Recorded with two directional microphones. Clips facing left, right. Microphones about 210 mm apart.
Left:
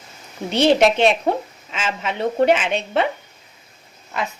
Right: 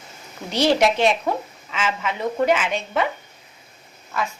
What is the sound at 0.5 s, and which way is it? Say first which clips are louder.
Speech: left 3 dB; 25° left (ahead or behind).